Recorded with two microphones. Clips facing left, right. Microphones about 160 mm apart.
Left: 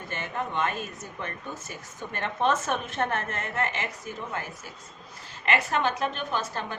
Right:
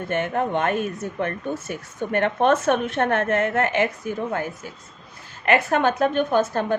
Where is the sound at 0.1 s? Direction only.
60° right (ahead or behind).